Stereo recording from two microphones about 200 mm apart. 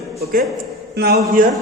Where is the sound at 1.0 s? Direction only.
50° right (ahead or behind).